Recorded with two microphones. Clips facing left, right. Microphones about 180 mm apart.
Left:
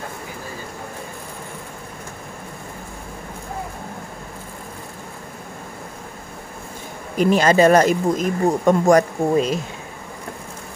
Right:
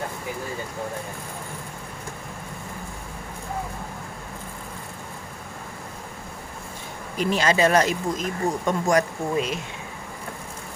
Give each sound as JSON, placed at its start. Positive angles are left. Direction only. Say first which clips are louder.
{"t": 7.2, "sound": "speech", "louder": "left 6 dB", "side_deg": 50}